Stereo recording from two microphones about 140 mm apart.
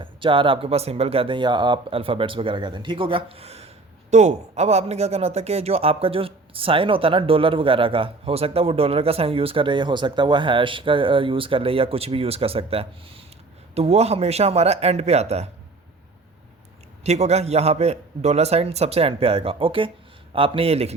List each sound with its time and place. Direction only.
0.0 s a man's voice: 35° right (ahead or behind)
17.0 s a man's voice: 50° right (ahead or behind)